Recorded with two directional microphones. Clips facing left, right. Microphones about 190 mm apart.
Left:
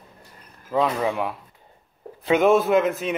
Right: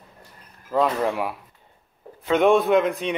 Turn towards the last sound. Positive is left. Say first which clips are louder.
# even
turn(degrees=5)  # may be behind; listen again after turning